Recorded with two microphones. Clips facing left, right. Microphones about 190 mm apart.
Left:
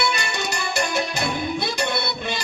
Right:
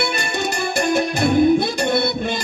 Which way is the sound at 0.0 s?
50° right (ahead or behind).